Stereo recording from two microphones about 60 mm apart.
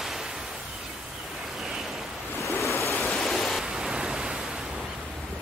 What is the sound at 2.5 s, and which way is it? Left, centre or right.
Waves, left.